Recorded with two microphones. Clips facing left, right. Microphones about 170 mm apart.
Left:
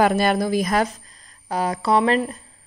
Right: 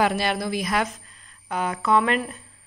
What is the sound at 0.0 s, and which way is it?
Speech, 45° left (ahead or behind).